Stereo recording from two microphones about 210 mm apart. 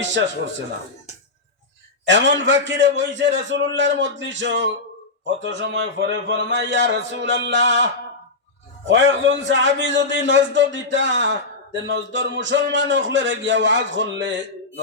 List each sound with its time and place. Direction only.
2.0 s a man's voice: 60° right (ahead or behind)
8.9 s a man's voice: 60° right (ahead or behind)